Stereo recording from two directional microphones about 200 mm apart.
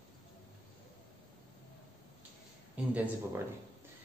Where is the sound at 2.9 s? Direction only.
10° right (ahead or behind).